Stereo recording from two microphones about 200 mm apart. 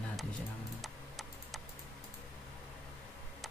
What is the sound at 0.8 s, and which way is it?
Computer keyboard, centre (ahead or behind).